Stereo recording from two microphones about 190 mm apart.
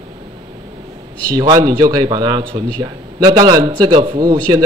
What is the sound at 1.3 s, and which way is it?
A man's voice, 20° right (ahead or behind).